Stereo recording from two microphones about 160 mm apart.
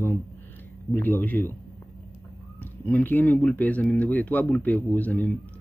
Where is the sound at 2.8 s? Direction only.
10° left (ahead or behind).